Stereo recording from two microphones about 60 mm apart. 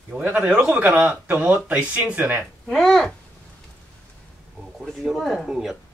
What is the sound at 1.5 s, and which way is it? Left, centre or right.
Speech, right.